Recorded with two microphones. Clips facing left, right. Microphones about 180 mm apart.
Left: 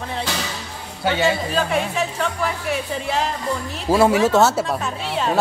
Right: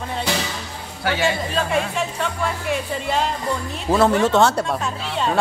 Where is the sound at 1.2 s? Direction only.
Centre (ahead or behind).